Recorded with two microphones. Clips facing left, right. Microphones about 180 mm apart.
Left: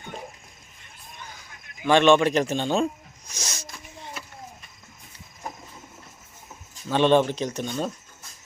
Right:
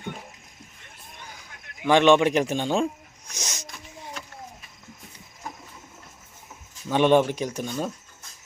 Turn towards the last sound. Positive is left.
turn(degrees=-5)  # may be behind; listen again after turning